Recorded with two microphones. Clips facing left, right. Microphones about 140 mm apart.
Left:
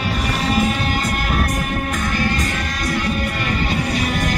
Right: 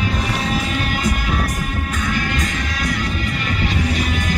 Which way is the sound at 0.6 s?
50° left (ahead or behind).